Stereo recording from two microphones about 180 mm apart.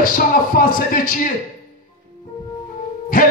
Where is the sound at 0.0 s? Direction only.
50° left (ahead or behind).